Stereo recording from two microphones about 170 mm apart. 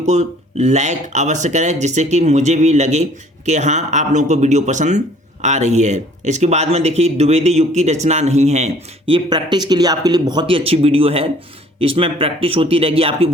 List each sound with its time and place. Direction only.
0.0 s speech: 40° right (ahead or behind)